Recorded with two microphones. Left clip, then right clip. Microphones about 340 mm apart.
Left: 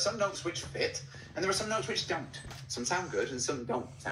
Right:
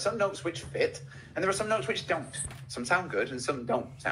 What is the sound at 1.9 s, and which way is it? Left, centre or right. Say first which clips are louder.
Speech: right 3 dB; centre.